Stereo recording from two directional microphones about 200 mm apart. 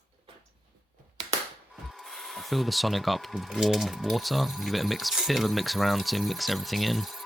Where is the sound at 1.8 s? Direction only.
Centre (ahead or behind).